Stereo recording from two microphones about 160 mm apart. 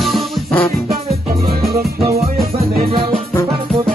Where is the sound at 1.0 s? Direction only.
70° right (ahead or behind).